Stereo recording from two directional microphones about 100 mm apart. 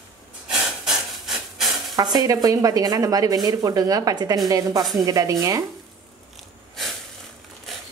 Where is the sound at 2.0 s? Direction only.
40° right (ahead or behind).